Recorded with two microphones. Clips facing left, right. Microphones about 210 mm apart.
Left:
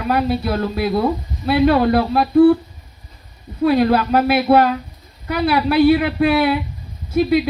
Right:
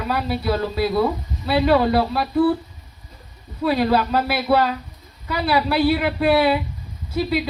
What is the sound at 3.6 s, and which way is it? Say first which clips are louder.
A woman's voice: left 4 dB; 50° left (ahead or behind).